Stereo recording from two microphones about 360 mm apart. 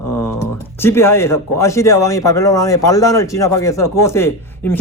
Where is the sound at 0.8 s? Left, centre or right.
Centre.